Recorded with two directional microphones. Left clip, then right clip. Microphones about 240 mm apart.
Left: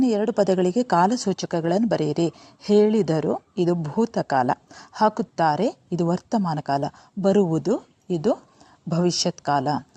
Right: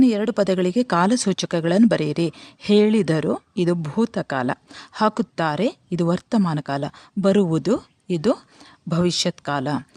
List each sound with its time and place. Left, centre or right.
0.0 s speech: centre
6.3 s speech: right
6.6 s speech: centre